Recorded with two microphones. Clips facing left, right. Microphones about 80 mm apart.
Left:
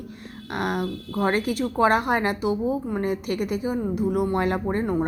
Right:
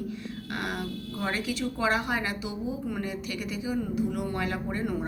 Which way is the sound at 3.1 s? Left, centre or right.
Left.